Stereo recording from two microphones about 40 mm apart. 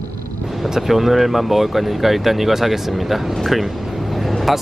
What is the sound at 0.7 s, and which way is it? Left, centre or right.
Speech, centre.